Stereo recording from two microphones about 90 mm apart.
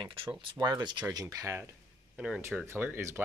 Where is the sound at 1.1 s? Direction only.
40° right (ahead or behind).